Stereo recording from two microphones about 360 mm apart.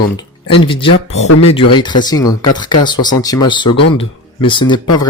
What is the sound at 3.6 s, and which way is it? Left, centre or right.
Speech, left.